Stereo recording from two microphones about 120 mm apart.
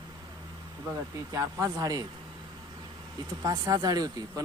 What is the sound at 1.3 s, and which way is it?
Speech, 30° right (ahead or behind).